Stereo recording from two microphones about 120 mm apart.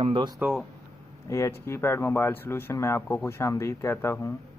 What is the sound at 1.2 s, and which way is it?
Speech, 25° left (ahead or behind).